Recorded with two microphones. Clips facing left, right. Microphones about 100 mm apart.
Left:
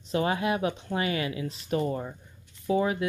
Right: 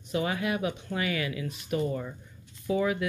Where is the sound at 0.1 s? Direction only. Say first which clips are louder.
Left 3 dB; 30° left (ahead or behind).